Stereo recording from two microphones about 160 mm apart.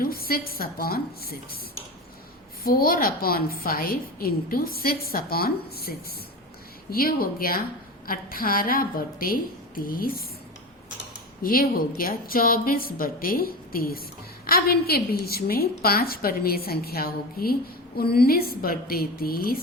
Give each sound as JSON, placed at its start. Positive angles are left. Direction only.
{"t": 0.0, "sound": "a woman's voice", "side_deg": 70}
{"t": 2.6, "sound": "a woman's voice", "side_deg": 65}
{"t": 11.4, "sound": "a woman's voice", "side_deg": 65}